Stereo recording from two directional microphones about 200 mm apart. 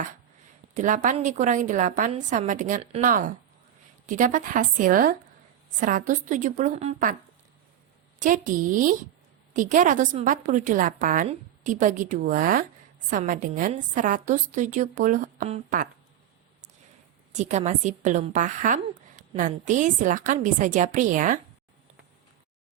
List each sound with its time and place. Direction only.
0.7 s a woman's voice: 40° right (ahead or behind)
8.2 s a woman's voice: 40° right (ahead or behind)
17.3 s a woman's voice: 35° right (ahead or behind)